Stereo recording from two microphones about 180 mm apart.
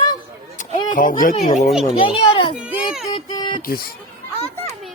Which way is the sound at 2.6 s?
5° right (ahead or behind).